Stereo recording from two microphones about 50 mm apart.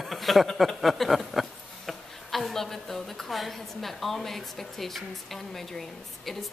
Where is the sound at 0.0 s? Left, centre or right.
Centre.